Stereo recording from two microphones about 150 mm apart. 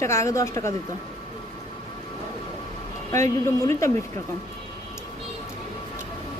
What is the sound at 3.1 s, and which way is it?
Speech, 20° left (ahead or behind).